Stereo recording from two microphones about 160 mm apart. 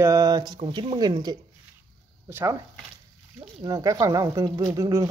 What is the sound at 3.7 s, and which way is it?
Speech, 25° right (ahead or behind).